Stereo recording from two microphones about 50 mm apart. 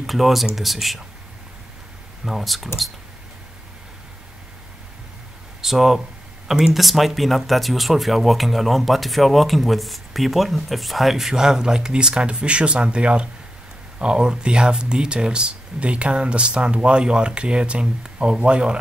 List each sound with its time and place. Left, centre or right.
0.0 s speech: centre
2.2 s speech: centre
5.6 s speech: centre